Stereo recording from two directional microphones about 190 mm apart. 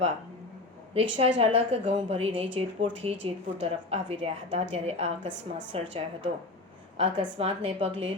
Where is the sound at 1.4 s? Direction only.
30° right (ahead or behind).